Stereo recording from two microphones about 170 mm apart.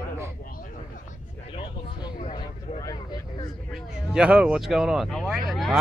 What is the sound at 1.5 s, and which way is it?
Speech, 30° left (ahead or behind).